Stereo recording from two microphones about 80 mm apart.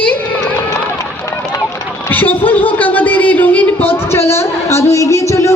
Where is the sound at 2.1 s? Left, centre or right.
Left.